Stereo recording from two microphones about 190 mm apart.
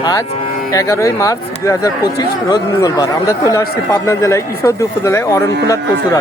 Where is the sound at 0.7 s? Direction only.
15° left (ahead or behind).